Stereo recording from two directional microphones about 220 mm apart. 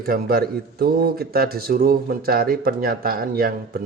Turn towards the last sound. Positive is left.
turn(degrees=-45)  # may be behind; listen again after turning